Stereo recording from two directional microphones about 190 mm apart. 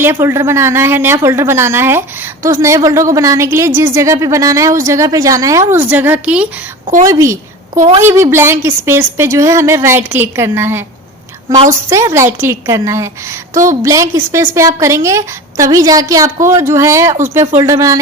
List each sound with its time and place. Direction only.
0.0 s a woman's voice: 15° right (ahead or behind)
7.8 s a woman's voice: 30° right (ahead or behind)
8.0 s a woman's voice: 10° right (ahead or behind)
11.9 s a woman's voice: 15° right (ahead or behind)